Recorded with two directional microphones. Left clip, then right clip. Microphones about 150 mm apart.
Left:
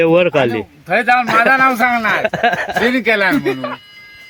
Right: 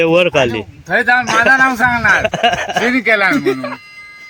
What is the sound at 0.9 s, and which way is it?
Speech, 30° left (ahead or behind).